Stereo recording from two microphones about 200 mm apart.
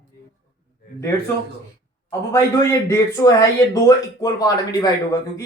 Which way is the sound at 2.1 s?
15° left (ahead or behind).